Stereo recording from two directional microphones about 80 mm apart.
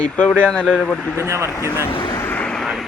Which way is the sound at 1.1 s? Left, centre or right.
Right.